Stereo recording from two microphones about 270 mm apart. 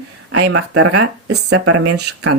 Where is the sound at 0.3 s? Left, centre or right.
Right.